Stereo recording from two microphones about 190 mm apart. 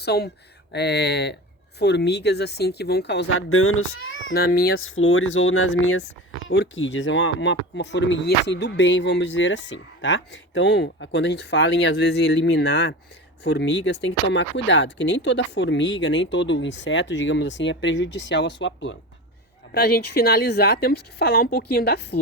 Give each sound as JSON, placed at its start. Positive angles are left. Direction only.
{"t": 0.0, "sound": "speech", "side_deg": 60}
{"t": 4.4, "sound": "speech", "side_deg": 55}
{"t": 4.8, "sound": "speech", "side_deg": 90}
{"t": 6.5, "sound": "speech", "side_deg": 70}
{"t": 19.7, "sound": "speech", "side_deg": 55}